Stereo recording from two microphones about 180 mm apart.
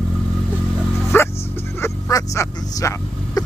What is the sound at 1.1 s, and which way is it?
Bow-wow, 15° left (ahead or behind).